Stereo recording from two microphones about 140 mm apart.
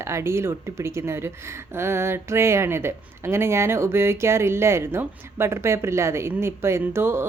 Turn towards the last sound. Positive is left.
turn(degrees=-15)  # may be behind; listen again after turning